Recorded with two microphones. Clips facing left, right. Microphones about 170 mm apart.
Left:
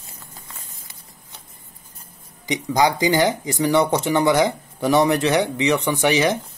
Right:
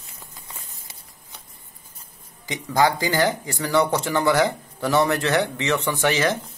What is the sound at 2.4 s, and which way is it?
Speech, 20° left (ahead or behind).